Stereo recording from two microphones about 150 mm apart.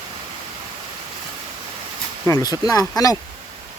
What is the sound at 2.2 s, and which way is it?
Speech, 25° left (ahead or behind).